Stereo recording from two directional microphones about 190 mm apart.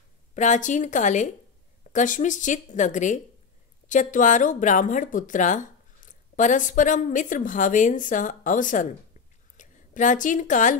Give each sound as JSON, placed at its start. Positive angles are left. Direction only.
{"t": 0.3, "sound": "a woman's voice", "side_deg": 40}